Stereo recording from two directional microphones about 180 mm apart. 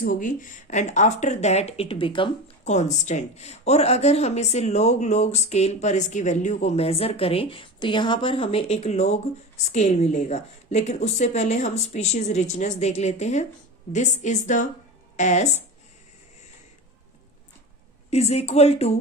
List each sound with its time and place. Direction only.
0.0 s speech: 45° left (ahead or behind); by 2.7 s 30° left (ahead or behind)
2.7 s speech: 40° left (ahead or behind)
18.1 s speech: 35° left (ahead or behind)